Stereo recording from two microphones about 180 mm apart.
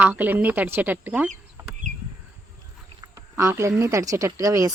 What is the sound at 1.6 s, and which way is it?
Bird, 15° right (ahead or behind).